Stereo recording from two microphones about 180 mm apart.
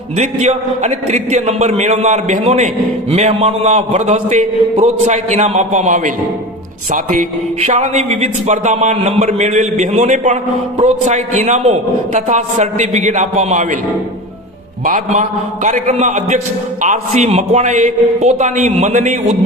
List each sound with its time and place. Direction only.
0.2 s speech: 40° right (ahead or behind)
14.8 s a man's voice: 45° right (ahead or behind)